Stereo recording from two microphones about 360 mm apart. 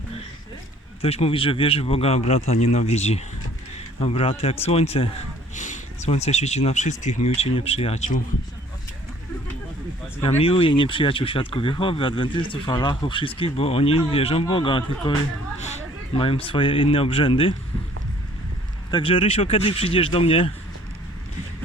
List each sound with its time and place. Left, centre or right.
1.0 s speech: centre
10.2 s speech: centre
18.9 s speech: centre